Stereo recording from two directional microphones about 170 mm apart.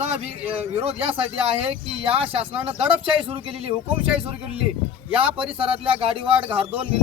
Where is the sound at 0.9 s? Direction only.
35° right (ahead or behind).